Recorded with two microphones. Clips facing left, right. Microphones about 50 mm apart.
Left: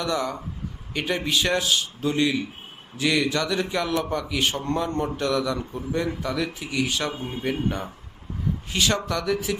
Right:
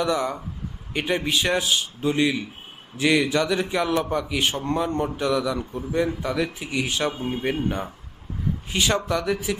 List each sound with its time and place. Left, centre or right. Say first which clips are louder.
0.0 s a man's voice: right 3 dB; right
5.0 s speech: right 1 dB; centre
5.7 s a man's voice: right 2 dB; centre